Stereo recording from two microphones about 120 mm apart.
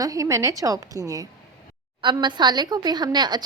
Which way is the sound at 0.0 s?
30° right (ahead or behind).